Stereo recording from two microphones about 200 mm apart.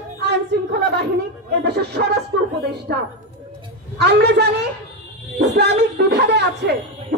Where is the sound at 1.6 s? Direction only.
55° right (ahead or behind).